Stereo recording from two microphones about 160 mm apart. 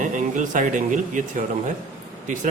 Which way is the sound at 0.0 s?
55° right (ahead or behind).